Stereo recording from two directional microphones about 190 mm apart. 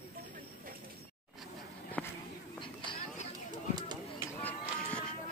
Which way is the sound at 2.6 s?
25° left (ahead or behind).